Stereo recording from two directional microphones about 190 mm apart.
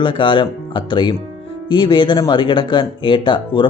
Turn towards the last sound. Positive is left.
turn(degrees=25)  # may be behind; listen again after turning